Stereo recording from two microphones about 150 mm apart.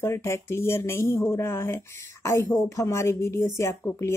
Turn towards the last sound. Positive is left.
turn(degrees=20)  # may be behind; listen again after turning